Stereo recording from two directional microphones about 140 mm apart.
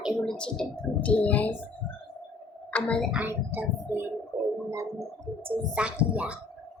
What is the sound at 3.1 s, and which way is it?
Speech, 15° right (ahead or behind).